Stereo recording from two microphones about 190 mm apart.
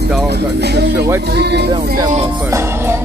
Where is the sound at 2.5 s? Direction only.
15° right (ahead or behind).